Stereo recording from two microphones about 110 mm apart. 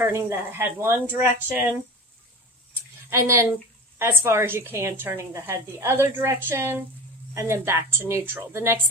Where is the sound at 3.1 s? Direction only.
25° right (ahead or behind).